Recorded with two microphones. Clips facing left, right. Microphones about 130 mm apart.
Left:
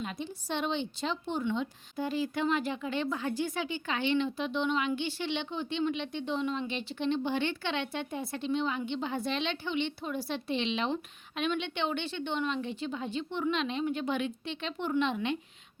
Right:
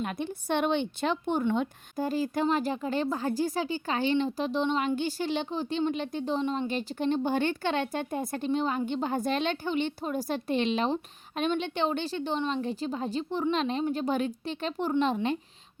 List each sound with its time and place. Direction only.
0.0 s a woman's voice: 55° right (ahead or behind)
1.5 s a woman's voice: 40° right (ahead or behind)